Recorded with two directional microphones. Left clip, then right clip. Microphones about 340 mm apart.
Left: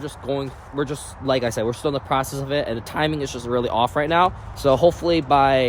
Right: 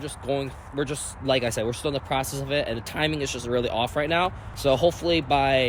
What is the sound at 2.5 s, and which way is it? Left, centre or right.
Speech, centre.